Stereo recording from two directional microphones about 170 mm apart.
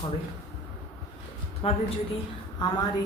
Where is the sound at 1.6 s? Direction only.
35° left (ahead or behind).